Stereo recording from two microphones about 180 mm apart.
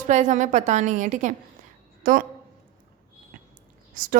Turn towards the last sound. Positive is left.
turn(degrees=-50)  # may be behind; listen again after turning